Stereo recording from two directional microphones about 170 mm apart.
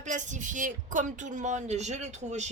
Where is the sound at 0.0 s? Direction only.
45° right (ahead or behind).